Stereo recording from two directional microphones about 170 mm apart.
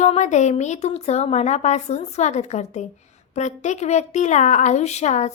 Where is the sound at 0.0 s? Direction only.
45° left (ahead or behind).